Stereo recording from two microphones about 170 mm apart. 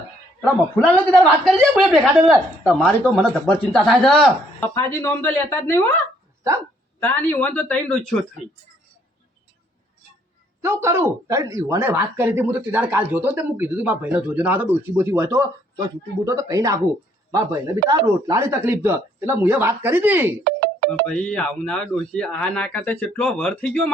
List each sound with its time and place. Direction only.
0.4 s speech: 5° left (ahead or behind)
3.0 s speech: 10° left (ahead or behind)
7.0 s speech: 10° left (ahead or behind)
10.6 s speech: 15° right (ahead or behind)
21.1 s speech: 5° left (ahead or behind)